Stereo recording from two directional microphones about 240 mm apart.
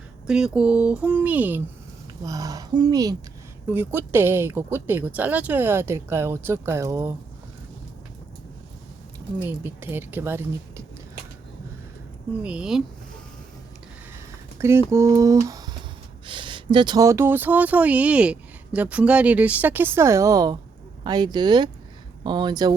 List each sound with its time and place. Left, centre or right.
0.3 s speech: centre
9.4 s speech: centre
12.4 s speech: centre
14.6 s speech: centre
15.4 s a sound: centre
16.2 s speech: centre